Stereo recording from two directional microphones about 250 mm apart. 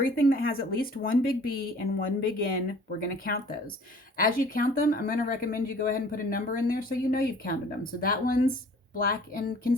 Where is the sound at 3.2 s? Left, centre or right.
Left.